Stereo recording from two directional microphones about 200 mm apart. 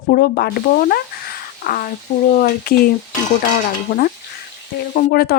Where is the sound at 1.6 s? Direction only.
45° left (ahead or behind).